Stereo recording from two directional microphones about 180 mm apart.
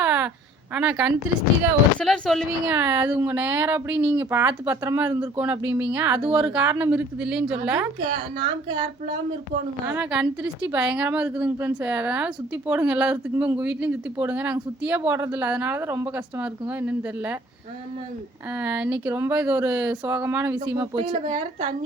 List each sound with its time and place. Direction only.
0.0 s a sound: 10° right (ahead or behind)
0.7 s a woman's voice: 5° right (ahead or behind)
2.6 s a woman's voice: 10° right (ahead or behind)
8.1 s speech: 25° right (ahead or behind)
9.9 s a woman's voice: 10° right (ahead or behind)
18.6 s a woman's voice: 10° right (ahead or behind)
20.9 s speech: 30° right (ahead or behind)